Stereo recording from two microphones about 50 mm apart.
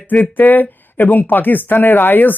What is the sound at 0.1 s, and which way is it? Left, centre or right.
Speech, left.